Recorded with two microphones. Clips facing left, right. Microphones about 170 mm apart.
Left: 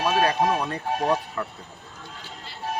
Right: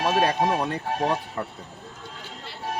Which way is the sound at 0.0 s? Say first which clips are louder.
Even; 20° right (ahead or behind).